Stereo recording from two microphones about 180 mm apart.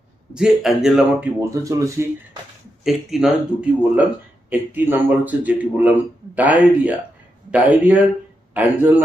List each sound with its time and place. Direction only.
0.3 s speech: 5° right (ahead or behind)
1.4 s a man's voice: 15° right (ahead or behind)
2.8 s a man's voice: centre (ahead or behind)